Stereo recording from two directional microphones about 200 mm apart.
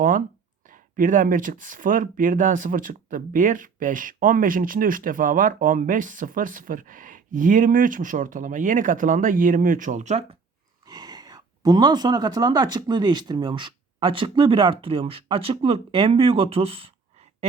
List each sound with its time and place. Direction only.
0.7 s speech: 40° right (ahead or behind)
10.8 s speech: 20° right (ahead or behind)